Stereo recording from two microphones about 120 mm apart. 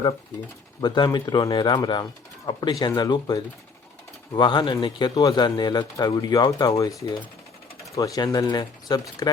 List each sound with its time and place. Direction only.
0.8 s speech: 35° left (ahead or behind)
7.9 s speech: 30° left (ahead or behind)